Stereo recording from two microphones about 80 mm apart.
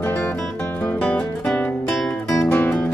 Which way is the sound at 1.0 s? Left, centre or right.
Centre.